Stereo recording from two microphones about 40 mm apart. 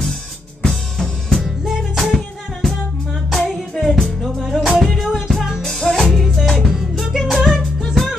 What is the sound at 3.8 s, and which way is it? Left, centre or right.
Music, centre.